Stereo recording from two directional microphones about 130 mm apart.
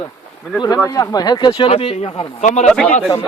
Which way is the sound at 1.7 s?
50° left (ahead or behind).